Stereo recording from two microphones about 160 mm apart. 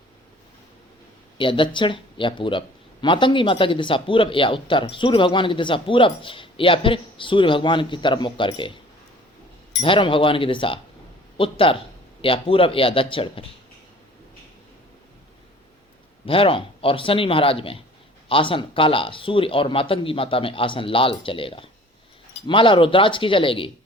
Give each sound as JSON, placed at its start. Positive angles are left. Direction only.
{"t": 1.4, "sound": "speech", "side_deg": 30}
{"t": 9.8, "sound": "speech", "side_deg": 35}
{"t": 16.2, "sound": "speech", "side_deg": 35}